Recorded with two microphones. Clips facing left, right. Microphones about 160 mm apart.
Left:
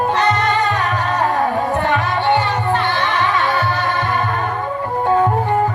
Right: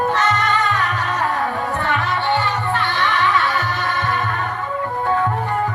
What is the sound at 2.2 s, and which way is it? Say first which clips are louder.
Music: left 4 dB; 15° left (ahead or behind).